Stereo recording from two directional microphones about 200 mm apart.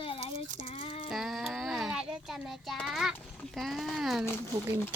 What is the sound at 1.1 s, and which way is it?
A child's voice, centre (ahead or behind).